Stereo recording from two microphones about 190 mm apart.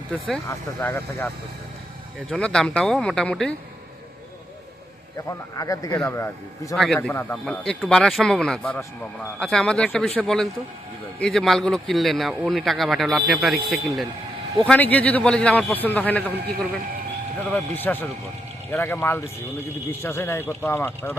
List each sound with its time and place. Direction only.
0.4 s a man's voice: 10° left (ahead or behind)
2.3 s speech: 5° left (ahead or behind)
5.5 s a man's voice: 15° left (ahead or behind)
6.7 s a man's voice: centre (ahead or behind)